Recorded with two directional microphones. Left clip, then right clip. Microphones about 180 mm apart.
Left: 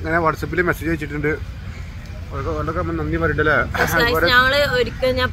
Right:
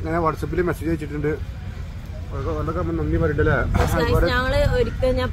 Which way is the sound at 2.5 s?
10° left (ahead or behind).